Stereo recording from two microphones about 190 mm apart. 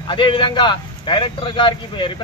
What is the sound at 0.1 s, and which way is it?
A man's voice, 25° left (ahead or behind).